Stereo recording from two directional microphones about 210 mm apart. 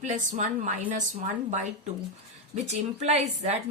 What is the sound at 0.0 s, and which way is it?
A woman's voice, 35° right (ahead or behind).